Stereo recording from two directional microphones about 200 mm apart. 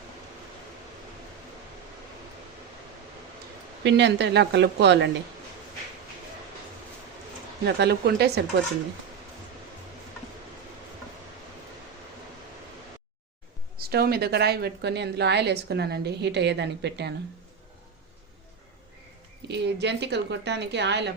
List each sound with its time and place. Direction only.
3.8 s a woman's voice: 60° right (ahead or behind)
7.6 s a woman's voice: 55° right (ahead or behind)
13.9 s a woman's voice: 50° right (ahead or behind)
19.5 s a woman's voice: 60° right (ahead or behind)